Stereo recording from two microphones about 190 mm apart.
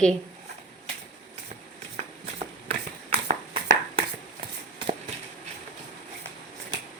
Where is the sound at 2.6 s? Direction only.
30° right (ahead or behind).